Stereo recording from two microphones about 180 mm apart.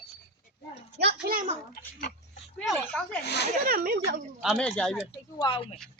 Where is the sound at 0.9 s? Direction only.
60° right (ahead or behind).